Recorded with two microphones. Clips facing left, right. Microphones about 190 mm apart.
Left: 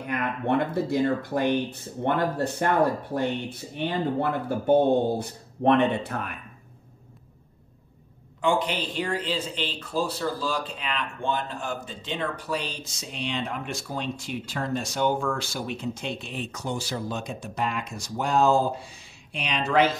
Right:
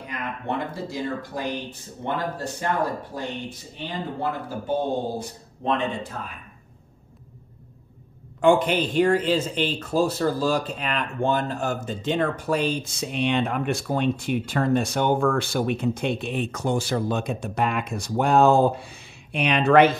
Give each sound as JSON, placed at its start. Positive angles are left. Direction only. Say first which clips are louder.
{"t": 0.0, "sound": "speech", "louder": "left 4 dB", "side_deg": 60}
{"t": 8.4, "sound": "speech", "louder": "right 6 dB", "side_deg": -50}